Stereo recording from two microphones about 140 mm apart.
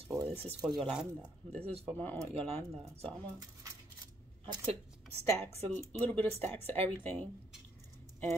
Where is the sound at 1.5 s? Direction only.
45° right (ahead or behind).